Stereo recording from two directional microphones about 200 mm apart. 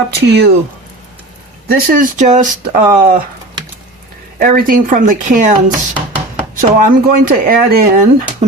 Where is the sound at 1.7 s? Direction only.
45° right (ahead or behind).